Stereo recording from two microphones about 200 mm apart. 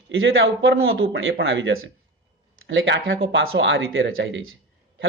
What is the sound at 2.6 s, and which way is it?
A man's voice, 70° right (ahead or behind).